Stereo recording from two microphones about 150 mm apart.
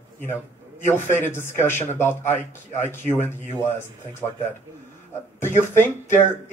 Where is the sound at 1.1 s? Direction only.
15° left (ahead or behind).